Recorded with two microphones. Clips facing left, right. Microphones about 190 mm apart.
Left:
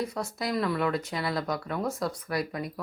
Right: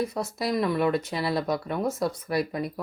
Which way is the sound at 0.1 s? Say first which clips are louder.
Right 3 dB; 25° right (ahead or behind).